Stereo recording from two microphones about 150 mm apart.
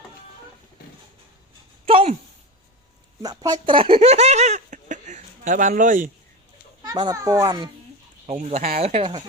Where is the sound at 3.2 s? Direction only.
25° right (ahead or behind); by 6.1 s 60° right (ahead or behind).